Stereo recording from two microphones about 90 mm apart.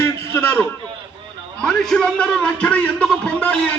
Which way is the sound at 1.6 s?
5° left (ahead or behind).